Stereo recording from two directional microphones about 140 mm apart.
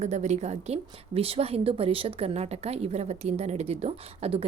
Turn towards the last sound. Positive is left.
turn(degrees=-45)  # may be behind; listen again after turning